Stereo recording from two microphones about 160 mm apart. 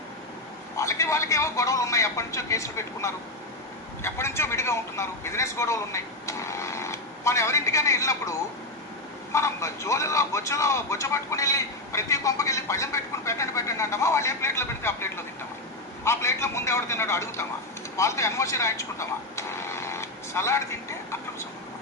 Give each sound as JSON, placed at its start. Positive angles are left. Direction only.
{"t": 0.8, "sound": "a man's voice", "side_deg": 20}
{"t": 17.9, "sound": "vehicle", "side_deg": 20}